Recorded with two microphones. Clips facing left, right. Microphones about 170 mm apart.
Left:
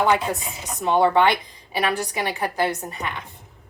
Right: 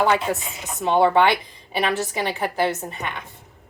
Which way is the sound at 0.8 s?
25° right (ahead or behind).